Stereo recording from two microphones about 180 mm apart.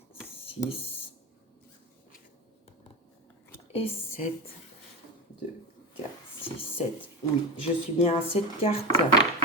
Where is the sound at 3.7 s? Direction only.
30° left (ahead or behind).